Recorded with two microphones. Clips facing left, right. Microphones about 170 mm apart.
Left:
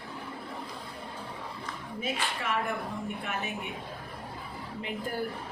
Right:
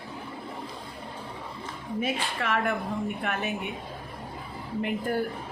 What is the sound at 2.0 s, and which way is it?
A woman's voice, 70° right (ahead or behind).